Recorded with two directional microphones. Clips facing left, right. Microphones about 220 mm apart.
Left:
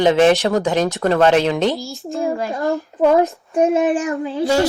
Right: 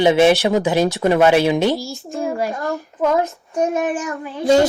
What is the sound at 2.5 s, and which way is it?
Speech, 15° left (ahead or behind).